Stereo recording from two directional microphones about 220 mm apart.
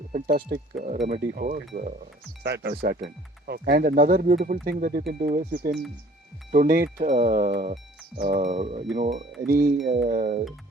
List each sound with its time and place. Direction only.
0.1 s speech: 40° right (ahead or behind)
2.4 s speech: 50° right (ahead or behind); by 9.0 s 25° right (ahead or behind)
9.5 s speech: 45° right (ahead or behind)